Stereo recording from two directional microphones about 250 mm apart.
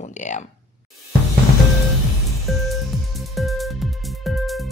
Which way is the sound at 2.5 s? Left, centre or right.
Centre.